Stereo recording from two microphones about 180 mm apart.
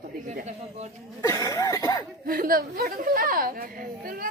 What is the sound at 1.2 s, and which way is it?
Cough, 20° left (ahead or behind).